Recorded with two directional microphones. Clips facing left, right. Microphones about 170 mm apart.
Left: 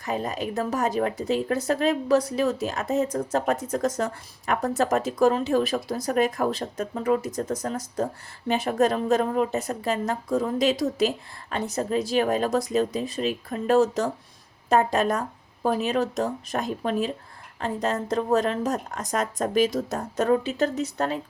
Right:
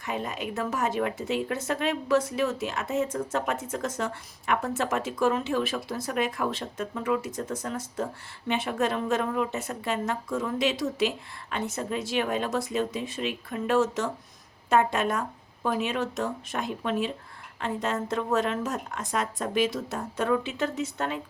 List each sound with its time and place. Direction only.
0.0 s speech: 35° left (ahead or behind)